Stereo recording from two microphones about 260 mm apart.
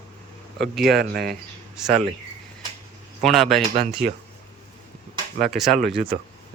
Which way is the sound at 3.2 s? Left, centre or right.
Centre.